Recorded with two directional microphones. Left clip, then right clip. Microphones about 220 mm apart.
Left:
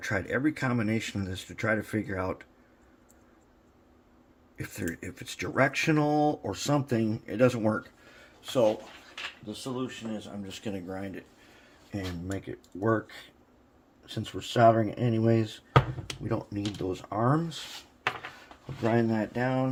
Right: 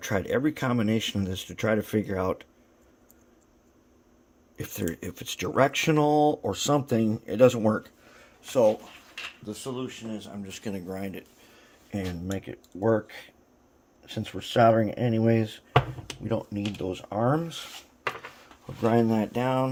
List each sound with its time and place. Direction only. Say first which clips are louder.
0.0 s speech: right 2 dB; 30° right (ahead or behind)
4.5 s speech: right 3 dB; 30° right (ahead or behind)
11.9 s speech: right 3 dB; 25° right (ahead or behind)
18.8 s speech: right 3 dB; 30° right (ahead or behind)